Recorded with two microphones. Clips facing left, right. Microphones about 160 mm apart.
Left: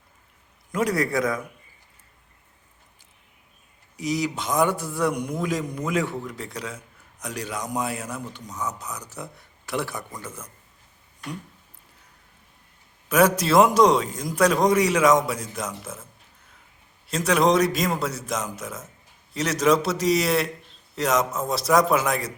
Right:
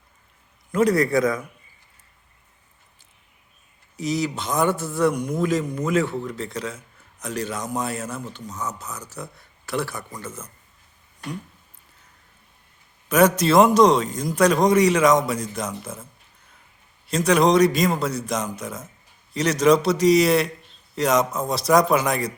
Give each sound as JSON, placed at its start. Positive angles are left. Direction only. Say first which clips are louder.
{"t": 0.7, "sound": "a man's voice", "louder": "right 5 dB", "side_deg": 10}
{"t": 3.9, "sound": "a man's voice", "louder": "right 1 dB", "side_deg": 10}
{"t": 10.1, "sound": "a man's voice", "louder": "right 2 dB", "side_deg": 0}
{"t": 13.1, "sound": "a man's voice", "louder": "right 2 dB", "side_deg": 10}
{"t": 17.1, "sound": "a man's voice", "louder": "right 2 dB", "side_deg": 5}